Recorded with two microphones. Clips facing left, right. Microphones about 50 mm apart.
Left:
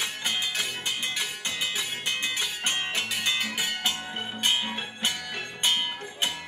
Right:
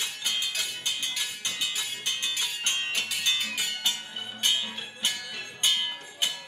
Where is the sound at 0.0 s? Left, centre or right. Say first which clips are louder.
Left 2 dB; left.